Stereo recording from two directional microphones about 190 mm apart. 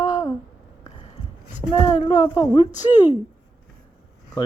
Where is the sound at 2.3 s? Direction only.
20° left (ahead or behind).